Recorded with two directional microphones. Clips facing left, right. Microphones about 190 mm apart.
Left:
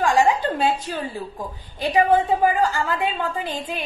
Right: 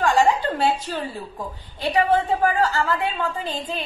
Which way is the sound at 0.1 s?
15° left (ahead or behind).